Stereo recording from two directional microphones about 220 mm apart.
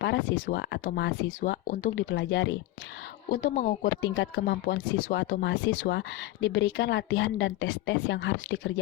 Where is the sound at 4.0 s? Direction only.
55° left (ahead or behind).